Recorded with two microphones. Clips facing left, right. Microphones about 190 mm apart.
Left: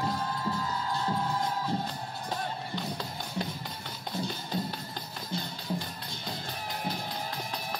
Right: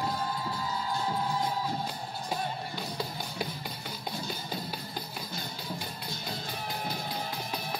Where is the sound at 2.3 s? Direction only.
5° right (ahead or behind).